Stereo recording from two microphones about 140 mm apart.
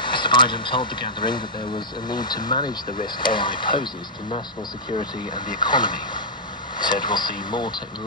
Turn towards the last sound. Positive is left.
turn(degrees=35)  # may be behind; listen again after turning